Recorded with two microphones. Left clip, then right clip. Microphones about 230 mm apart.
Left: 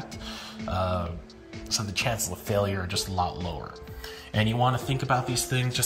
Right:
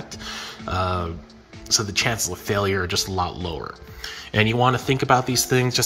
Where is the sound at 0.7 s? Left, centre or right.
Right.